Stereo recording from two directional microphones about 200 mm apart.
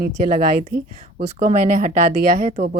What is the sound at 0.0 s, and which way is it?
Speech, 45° right (ahead or behind).